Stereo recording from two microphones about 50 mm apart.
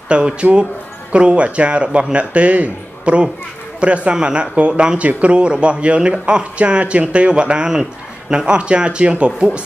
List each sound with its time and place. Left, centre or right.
0.1 s a man's voice: right